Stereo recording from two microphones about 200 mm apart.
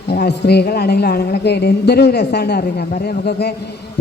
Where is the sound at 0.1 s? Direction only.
55° left (ahead or behind).